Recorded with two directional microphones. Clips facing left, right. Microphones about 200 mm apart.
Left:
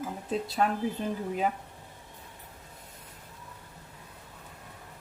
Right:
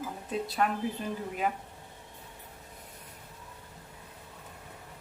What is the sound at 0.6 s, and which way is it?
Speech, 25° left (ahead or behind).